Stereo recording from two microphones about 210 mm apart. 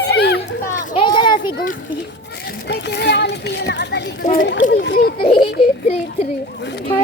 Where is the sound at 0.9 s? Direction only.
25° left (ahead or behind).